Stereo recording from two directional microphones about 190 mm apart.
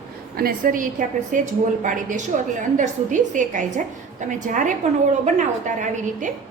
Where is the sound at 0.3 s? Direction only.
50° right (ahead or behind).